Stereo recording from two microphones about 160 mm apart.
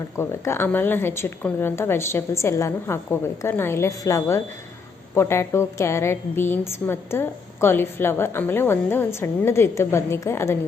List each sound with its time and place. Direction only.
0.2 s a woman's voice: 15° left (ahead or behind)